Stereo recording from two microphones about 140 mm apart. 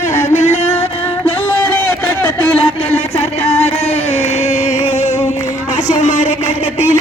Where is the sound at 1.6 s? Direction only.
15° left (ahead or behind).